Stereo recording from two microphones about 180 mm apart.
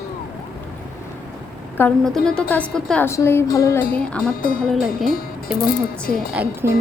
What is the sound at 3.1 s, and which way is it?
Music, 15° left (ahead or behind).